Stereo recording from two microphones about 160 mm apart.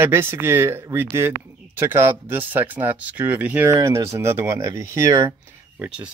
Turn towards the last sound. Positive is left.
turn(degrees=-10)  # may be behind; listen again after turning